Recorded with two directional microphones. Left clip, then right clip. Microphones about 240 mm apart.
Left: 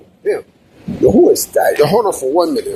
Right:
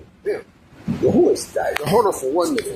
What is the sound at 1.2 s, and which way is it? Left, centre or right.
Speech, left.